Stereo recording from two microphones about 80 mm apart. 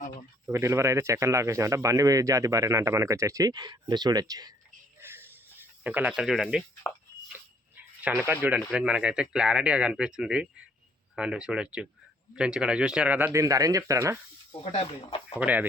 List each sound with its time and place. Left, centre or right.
0.5 s a man's voice: right
3.5 s speech: right
4.9 s a sound: right
6.1 s speech: centre
7.3 s dog: right
8.3 s speech: right
8.5 s speech: centre
13.3 s speech: right
15.4 s speech: centre